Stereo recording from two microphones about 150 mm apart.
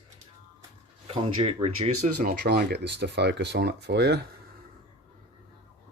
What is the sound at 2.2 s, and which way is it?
Speech, 90° right.